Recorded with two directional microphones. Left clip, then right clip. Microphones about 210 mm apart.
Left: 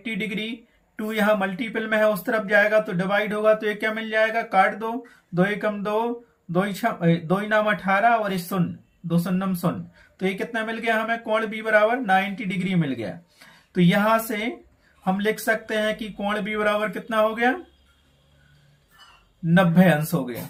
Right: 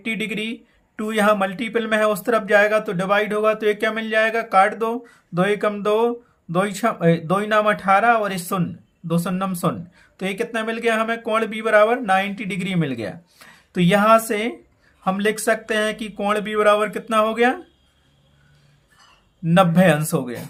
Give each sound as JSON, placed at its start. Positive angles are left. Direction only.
{"t": 0.0, "sound": "speech", "side_deg": -40}
{"t": 19.5, "sound": "speech", "side_deg": -40}